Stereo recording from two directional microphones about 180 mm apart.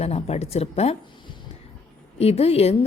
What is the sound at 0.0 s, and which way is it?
Speech, 35° left (ahead or behind).